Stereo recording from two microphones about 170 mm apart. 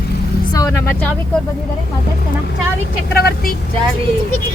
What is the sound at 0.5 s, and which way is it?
Vehicle, 20° left (ahead or behind).